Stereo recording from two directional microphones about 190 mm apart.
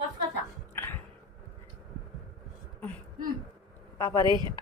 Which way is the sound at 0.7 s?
10° left (ahead or behind).